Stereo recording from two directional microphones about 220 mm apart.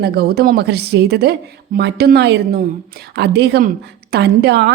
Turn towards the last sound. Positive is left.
turn(degrees=-50)  # may be behind; listen again after turning